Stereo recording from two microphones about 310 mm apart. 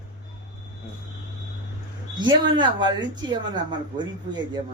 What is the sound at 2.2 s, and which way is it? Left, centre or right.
Speech, centre.